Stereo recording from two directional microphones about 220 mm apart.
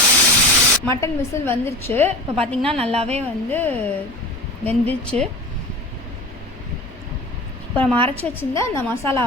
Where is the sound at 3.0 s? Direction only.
30° right (ahead or behind).